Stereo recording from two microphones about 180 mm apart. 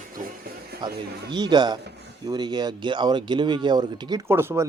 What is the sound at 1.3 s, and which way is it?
Speech, 25° right (ahead or behind).